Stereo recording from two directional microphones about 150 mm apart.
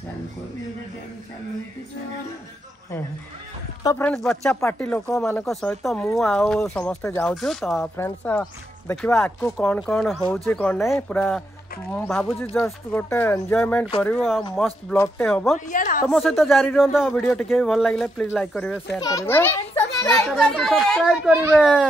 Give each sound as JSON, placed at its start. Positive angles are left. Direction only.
{"t": 4.0, "sound": "speech", "side_deg": 5}
{"t": 8.0, "sound": "speech", "side_deg": 10}
{"t": 12.4, "sound": "speech", "side_deg": 15}
{"t": 15.7, "sound": "speech", "side_deg": 65}
{"t": 16.1, "sound": "speech", "side_deg": 0}
{"t": 18.9, "sound": "a child's voice", "side_deg": 20}
{"t": 20.2, "sound": "speech", "side_deg": 0}